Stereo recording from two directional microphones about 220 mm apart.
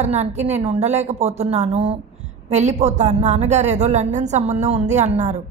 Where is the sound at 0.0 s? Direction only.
30° right (ahead or behind).